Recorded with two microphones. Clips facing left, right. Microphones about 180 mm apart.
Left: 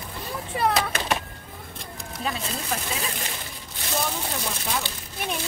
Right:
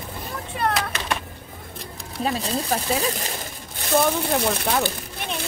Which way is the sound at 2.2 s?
35° right (ahead or behind).